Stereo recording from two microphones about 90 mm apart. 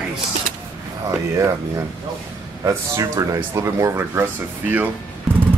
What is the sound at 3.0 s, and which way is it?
Speech, 45° right (ahead or behind).